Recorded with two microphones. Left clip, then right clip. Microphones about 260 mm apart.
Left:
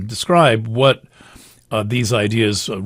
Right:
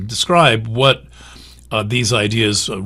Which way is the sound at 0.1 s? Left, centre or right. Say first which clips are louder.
Right 1 dB; left.